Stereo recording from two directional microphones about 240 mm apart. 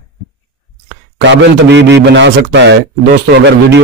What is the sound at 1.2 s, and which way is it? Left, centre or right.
Speech, right.